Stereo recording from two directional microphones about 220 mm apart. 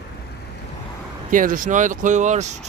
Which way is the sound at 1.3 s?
35° right (ahead or behind).